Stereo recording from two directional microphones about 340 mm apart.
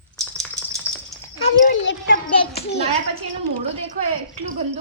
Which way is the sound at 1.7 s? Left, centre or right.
Left.